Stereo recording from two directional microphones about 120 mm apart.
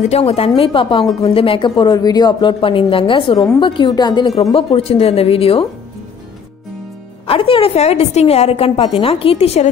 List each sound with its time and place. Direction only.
0.0 s a woman's voice: 60° left (ahead or behind)
0.6 s speech: 45° left (ahead or behind)
2.6 s speech: 50° left (ahead or behind)
4.6 s speech: 50° left (ahead or behind)
7.2 s a woman's voice: 50° left (ahead or behind)